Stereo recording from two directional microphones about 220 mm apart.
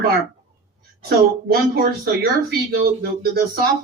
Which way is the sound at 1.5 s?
45° right (ahead or behind).